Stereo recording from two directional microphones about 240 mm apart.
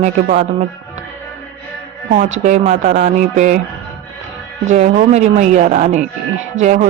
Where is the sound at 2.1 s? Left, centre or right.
Right.